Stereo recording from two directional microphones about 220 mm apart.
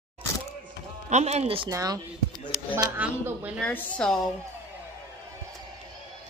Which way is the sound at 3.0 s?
5° right (ahead or behind).